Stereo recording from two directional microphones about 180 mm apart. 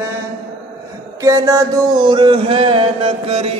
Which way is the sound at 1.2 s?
20° right (ahead or behind).